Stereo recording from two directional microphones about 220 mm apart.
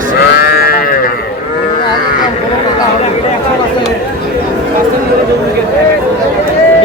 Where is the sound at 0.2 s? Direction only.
45° left (ahead or behind).